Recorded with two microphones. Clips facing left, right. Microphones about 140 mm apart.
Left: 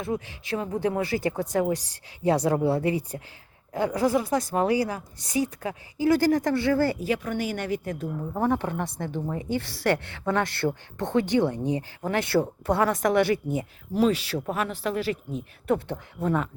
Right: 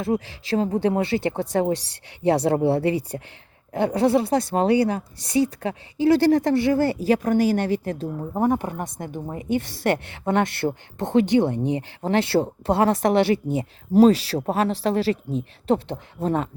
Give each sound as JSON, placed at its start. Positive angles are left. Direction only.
{"t": 0.0, "sound": "a woman's voice", "side_deg": -35}
{"t": 7.0, "sound": "speech", "side_deg": -40}
{"t": 8.4, "sound": "a woman's voice", "side_deg": -15}
{"t": 13.9, "sound": "speech", "side_deg": -40}